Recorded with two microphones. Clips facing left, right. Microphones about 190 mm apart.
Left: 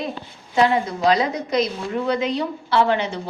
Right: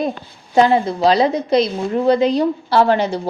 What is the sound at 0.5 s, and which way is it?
A woman's voice, 30° right (ahead or behind).